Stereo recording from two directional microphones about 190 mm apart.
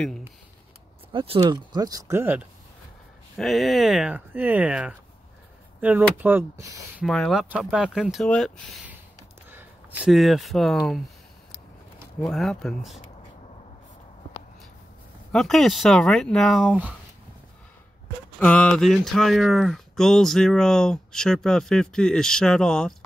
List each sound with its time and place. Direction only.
1.1 s speech: 30° right (ahead or behind); by 2.4 s 10° right (ahead or behind)
3.3 s speech: centre (ahead or behind)
7.1 s speech: centre (ahead or behind)
9.5 s speech: 10° right (ahead or behind)
12.3 s speech: centre (ahead or behind)
15.3 s speech: centre (ahead or behind)
18.4 s speech: 5° left (ahead or behind)